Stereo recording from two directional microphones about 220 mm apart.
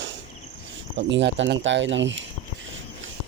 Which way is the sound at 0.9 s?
55° right (ahead or behind).